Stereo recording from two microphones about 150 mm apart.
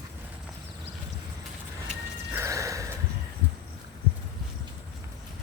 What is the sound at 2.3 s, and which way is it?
Music, 20° right (ahead or behind).